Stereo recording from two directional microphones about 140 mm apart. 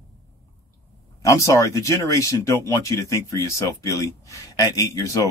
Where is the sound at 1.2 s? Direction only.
25° left (ahead or behind).